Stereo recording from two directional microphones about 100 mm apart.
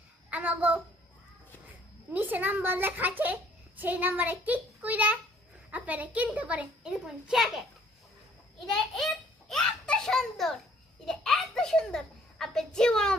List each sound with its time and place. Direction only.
0.3 s a child's voice: 15° right (ahead or behind)
2.1 s a child's voice: 15° right (ahead or behind)
6.9 s a child's voice: centre (ahead or behind)